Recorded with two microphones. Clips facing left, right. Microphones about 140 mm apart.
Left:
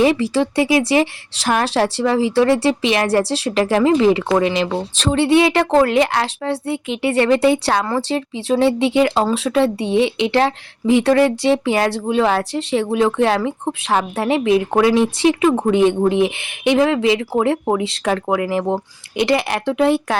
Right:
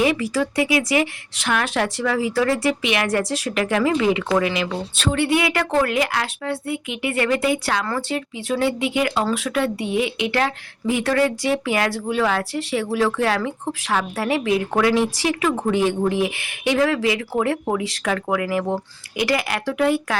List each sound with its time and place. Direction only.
0.0 s speech: 30° left (ahead or behind)